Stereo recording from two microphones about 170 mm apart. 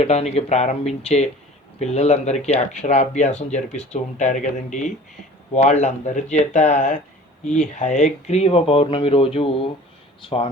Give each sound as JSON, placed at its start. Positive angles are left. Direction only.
{"t": 0.0, "sound": "speech", "side_deg": 40}